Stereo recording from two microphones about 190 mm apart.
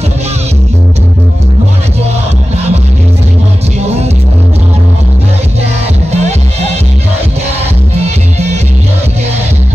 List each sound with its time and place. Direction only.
3.8 s music: 35° right (ahead or behind)
6.1 s music: 35° right (ahead or behind)
7.9 s music: 35° right (ahead or behind)